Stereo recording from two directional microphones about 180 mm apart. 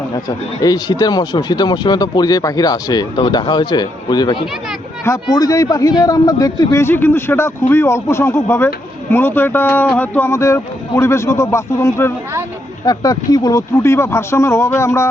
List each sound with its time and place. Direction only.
0.1 s speech: 20° left (ahead or behind)